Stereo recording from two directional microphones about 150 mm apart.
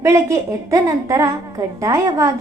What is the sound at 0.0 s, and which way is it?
A woman's voice, 20° right (ahead or behind).